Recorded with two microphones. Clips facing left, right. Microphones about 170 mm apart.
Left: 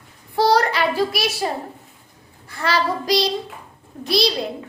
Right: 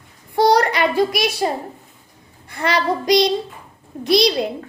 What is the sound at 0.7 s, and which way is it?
Speech, 15° right (ahead or behind).